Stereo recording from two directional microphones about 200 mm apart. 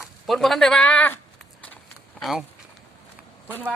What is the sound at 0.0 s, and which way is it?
Speech, centre (ahead or behind).